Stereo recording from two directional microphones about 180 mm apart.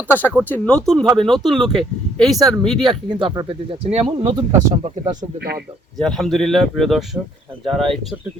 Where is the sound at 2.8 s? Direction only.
25° right (ahead or behind); by 5.5 s 45° right (ahead or behind).